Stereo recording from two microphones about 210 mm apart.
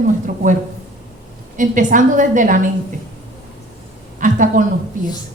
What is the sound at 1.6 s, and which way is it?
A woman's voice, 40° right (ahead or behind).